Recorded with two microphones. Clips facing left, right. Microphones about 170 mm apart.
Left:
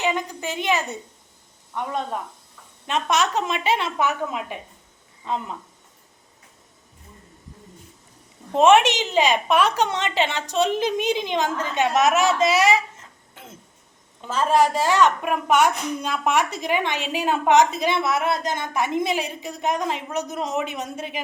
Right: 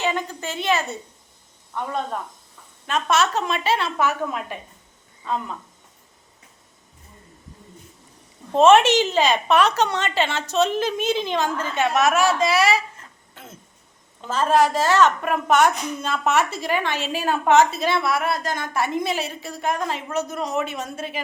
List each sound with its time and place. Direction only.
0.0 s a woman's voice: 15° left (ahead or behind)
2.8 s a woman's voice: 20° left (ahead or behind)
8.5 s a woman's voice: 15° left (ahead or behind)
14.3 s a woman's voice: 10° left (ahead or behind)